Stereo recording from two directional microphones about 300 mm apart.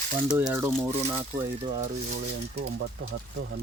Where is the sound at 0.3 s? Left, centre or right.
Centre.